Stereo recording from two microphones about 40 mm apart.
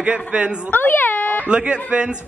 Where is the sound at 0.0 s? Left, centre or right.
Right.